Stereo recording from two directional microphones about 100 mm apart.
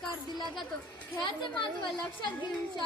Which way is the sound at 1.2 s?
50° left (ahead or behind).